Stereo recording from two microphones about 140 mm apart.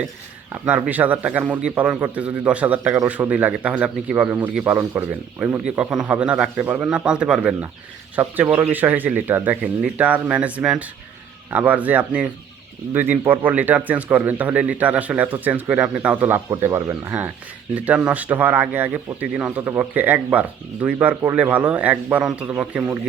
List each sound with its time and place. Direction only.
0.6 s speech: 10° right (ahead or behind)